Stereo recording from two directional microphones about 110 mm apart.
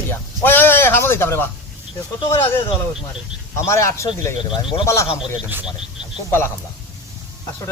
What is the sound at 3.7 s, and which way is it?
Speech, 25° left (ahead or behind).